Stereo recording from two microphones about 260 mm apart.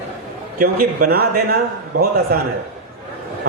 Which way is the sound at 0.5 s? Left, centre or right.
Right.